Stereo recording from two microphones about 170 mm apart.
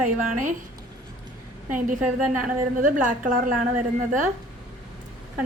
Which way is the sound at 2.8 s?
50° right (ahead or behind).